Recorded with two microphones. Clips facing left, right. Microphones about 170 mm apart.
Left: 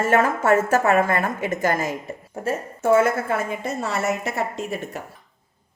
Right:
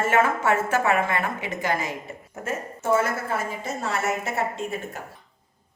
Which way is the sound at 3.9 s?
Centre (ahead or behind).